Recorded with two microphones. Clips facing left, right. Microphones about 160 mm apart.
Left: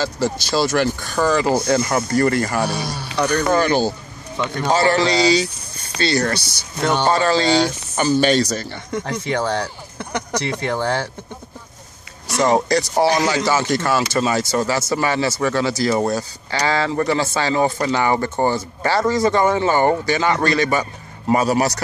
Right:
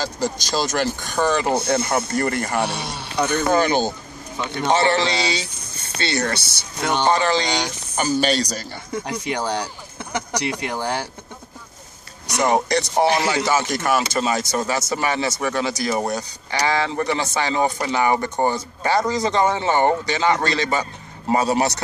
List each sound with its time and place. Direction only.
0.2 s speech: 15° right (ahead or behind)
8.9 s speech: 15° right (ahead or behind)
12.4 s speech: 20° right (ahead or behind)